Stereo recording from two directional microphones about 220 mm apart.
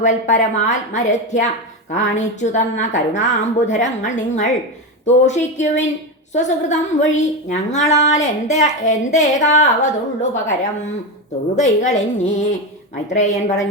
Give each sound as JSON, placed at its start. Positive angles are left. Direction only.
{"t": 0.0, "sound": "a woman's voice", "side_deg": 35}